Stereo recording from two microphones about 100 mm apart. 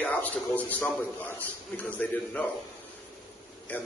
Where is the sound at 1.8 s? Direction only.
15° left (ahead or behind).